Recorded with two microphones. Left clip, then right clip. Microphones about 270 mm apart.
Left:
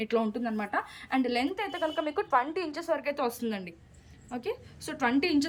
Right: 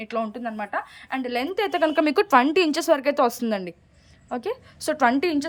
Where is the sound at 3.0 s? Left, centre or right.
Centre.